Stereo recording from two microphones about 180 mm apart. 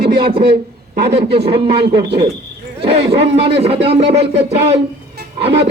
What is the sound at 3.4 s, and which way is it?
Speech, 35° right (ahead or behind).